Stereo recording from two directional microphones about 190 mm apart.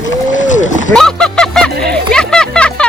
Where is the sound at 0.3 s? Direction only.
40° left (ahead or behind).